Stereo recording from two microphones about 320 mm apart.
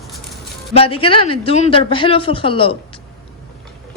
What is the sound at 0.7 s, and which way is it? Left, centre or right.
Speech, centre.